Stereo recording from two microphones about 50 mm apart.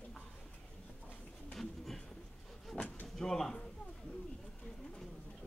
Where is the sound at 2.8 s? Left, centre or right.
Left.